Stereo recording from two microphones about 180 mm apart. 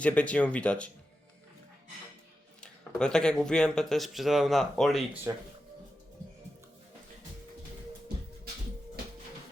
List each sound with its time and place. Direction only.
0.0 s speech: 5° left (ahead or behind)
2.6 s speech: 5° left (ahead or behind)
5.3 s speech: 20° right (ahead or behind)